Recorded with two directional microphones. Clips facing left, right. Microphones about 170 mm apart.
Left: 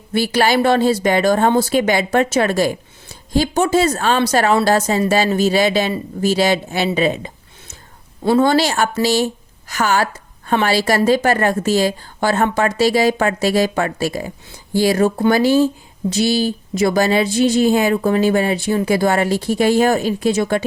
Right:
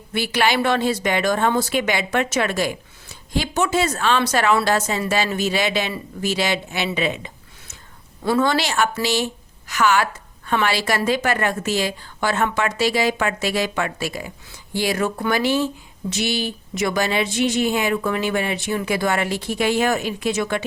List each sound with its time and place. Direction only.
0.1 s a woman's voice: 35° left (ahead or behind)